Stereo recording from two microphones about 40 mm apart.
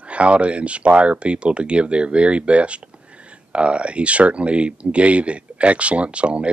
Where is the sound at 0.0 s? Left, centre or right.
Right.